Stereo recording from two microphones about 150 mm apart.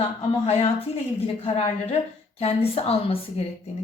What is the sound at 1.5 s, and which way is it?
A woman's voice, 40° left (ahead or behind).